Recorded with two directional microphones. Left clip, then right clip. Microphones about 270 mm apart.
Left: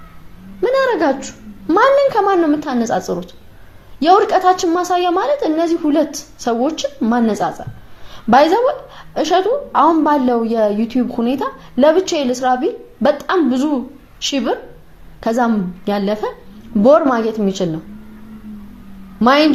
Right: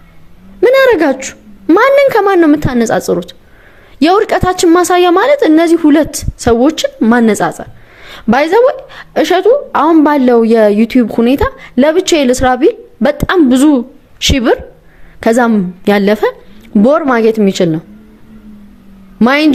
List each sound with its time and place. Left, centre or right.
0.6 s a woman's voice: right
19.2 s a woman's voice: right